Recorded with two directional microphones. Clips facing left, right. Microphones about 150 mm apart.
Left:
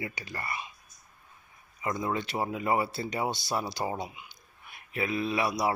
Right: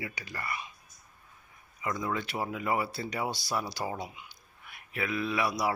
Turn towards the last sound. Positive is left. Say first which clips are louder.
# left 2 dB
turn(degrees=25)  # may be behind; listen again after turning